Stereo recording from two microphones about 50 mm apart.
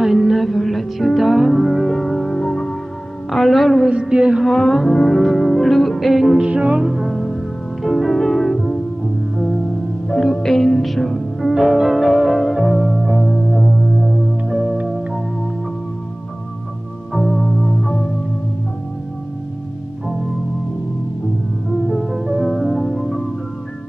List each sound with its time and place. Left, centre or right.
0.0 s music: centre
3.9 s music: centre
4.4 s music: centre
6.3 s music: right
7.0 s music: centre
10.0 s music: centre
11.5 s music: centre
17.1 s music: centre
21.7 s music: centre
22.1 s music: centre